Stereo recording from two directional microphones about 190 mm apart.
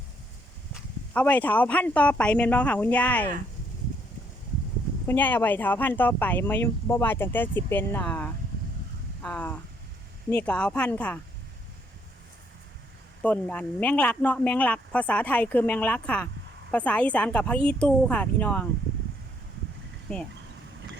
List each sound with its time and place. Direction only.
1.1 s speech: 10° left (ahead or behind)
5.0 s speech: 10° left (ahead or behind)
13.2 s speech: 5° left (ahead or behind)